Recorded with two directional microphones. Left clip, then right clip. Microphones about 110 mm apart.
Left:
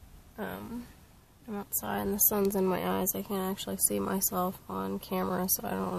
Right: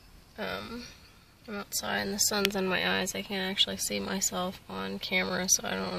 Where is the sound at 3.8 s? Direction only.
10° right (ahead or behind).